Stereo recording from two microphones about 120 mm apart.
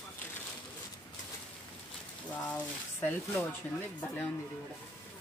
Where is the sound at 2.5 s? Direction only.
15° left (ahead or behind).